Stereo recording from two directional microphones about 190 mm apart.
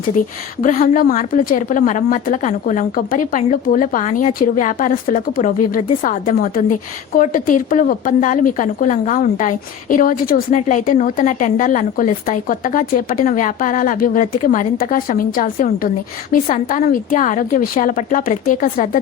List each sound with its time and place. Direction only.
0.2 s a woman's voice: 45° left (ahead or behind)